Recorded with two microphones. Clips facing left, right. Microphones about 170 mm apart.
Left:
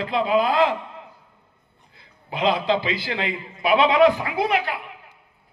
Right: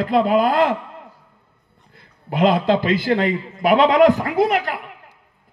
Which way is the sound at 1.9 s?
50° right (ahead or behind).